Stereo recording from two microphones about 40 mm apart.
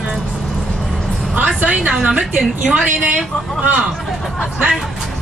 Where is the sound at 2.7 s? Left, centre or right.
Right.